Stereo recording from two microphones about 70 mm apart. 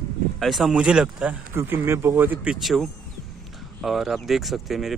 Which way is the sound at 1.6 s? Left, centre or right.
Right.